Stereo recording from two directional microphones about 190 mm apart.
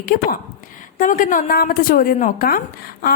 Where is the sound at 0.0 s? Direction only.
45° left (ahead or behind).